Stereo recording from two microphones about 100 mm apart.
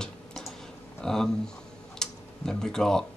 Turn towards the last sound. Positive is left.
turn(degrees=5)  # may be behind; listen again after turning